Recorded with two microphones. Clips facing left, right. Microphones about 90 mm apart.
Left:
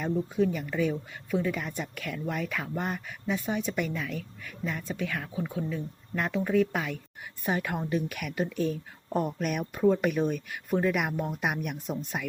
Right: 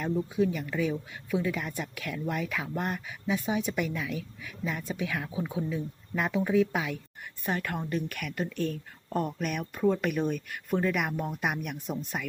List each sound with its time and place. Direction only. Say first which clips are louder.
0.0 s speech: left 1 dB; 5° right (ahead or behind)
7.4 s speech: left 2 dB; 10° left (ahead or behind)